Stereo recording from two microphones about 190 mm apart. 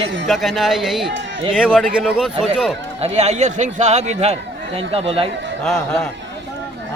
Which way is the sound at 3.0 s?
35° right (ahead or behind).